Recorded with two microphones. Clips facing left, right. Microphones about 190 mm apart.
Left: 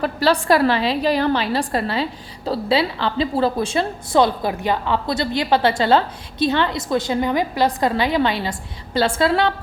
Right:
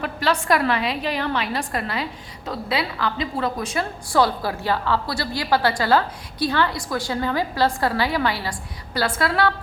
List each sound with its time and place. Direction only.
0.0 s a woman's voice: 35° left (ahead or behind)